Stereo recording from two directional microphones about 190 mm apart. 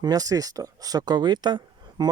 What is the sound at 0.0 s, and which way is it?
Speech, 20° right (ahead or behind).